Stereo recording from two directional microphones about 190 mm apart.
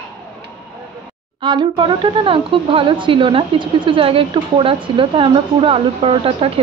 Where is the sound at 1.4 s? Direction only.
25° right (ahead or behind).